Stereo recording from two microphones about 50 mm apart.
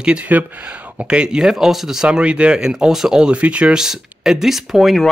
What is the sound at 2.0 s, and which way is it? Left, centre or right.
Speech, right.